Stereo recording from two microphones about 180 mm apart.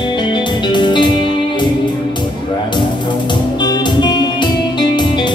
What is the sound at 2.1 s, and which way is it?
Music, 25° left (ahead or behind).